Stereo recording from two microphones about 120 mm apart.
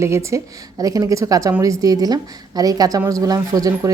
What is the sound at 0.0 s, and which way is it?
Speech, 25° right (ahead or behind).